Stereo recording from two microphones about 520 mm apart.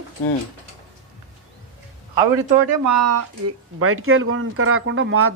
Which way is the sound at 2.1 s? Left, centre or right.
Right.